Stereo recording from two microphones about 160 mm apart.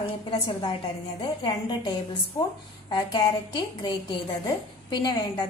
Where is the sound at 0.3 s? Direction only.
30° left (ahead or behind).